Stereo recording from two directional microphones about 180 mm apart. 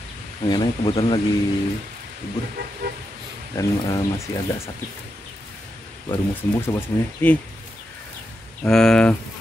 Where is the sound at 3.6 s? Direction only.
15° left (ahead or behind).